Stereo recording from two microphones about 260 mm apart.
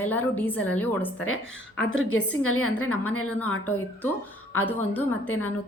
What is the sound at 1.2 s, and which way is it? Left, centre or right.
A woman's voice, left.